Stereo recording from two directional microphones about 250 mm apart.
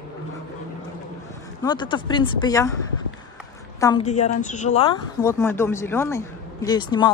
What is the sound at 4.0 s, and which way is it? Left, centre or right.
Speech, left.